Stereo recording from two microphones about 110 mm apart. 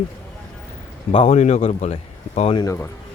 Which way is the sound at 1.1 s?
75° left (ahead or behind).